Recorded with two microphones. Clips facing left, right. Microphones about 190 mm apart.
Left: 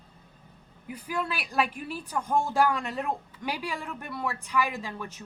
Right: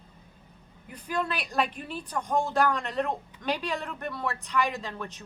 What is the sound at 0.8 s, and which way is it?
Speech, 10° left (ahead or behind).